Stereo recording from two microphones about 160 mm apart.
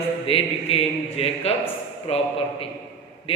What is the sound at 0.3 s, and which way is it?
A man's voice, 35° left (ahead or behind).